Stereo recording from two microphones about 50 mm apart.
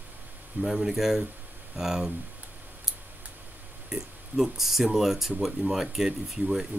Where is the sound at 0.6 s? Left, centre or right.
Centre.